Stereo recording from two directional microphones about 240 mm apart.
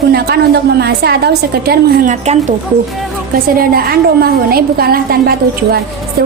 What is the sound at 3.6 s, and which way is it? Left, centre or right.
A woman's voice, right.